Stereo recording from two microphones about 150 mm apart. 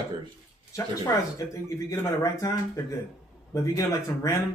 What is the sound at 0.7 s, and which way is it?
Speech, 20° left (ahead or behind).